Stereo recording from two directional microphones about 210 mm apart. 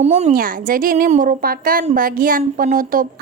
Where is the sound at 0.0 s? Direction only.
30° right (ahead or behind).